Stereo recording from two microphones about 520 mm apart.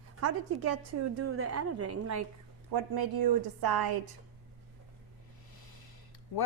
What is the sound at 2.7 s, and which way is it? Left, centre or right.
A woman's voice, right.